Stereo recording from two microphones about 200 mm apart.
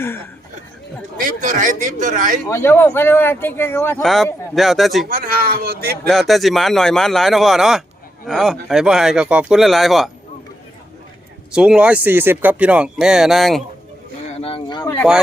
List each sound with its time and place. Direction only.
1.2 s a man's voice: 40° right (ahead or behind)
2.5 s speech: 10° left (ahead or behind)
4.0 s speech: centre (ahead or behind)
5.0 s speech: 45° right (ahead or behind)
6.1 s speech: centre (ahead or behind)
11.5 s speech: 5° right (ahead or behind)
14.4 s speech: 25° left (ahead or behind)